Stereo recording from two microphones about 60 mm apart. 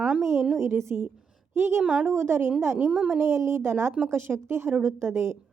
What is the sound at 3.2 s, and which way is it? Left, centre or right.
A woman's voice, right.